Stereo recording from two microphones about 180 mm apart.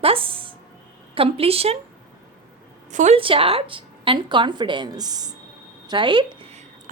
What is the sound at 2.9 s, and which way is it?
Speech, 40° right (ahead or behind).